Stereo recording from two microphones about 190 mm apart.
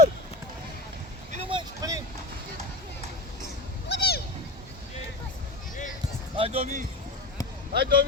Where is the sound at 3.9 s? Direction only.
60° left (ahead or behind).